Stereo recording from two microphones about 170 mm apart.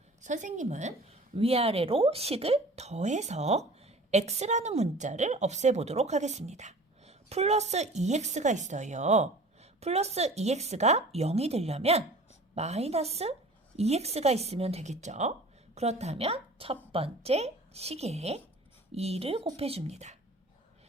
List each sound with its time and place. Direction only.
0.2 s a woman's voice: 45° right (ahead or behind)